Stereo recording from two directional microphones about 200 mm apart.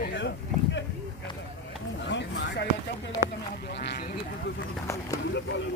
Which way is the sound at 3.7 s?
55° left (ahead or behind).